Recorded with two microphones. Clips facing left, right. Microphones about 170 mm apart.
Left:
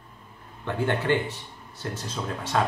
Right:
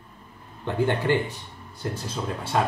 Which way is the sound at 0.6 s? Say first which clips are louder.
Right 2 dB; 15° right (ahead or behind).